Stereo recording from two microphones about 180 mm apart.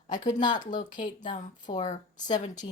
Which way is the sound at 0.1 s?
45° left (ahead or behind).